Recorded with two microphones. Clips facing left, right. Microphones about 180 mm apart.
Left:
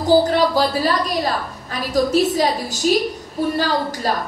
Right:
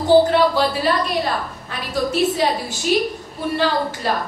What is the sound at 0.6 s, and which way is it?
A woman's voice, 40° left (ahead or behind).